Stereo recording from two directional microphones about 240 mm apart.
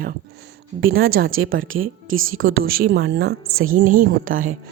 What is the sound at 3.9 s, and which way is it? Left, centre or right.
Speech, right.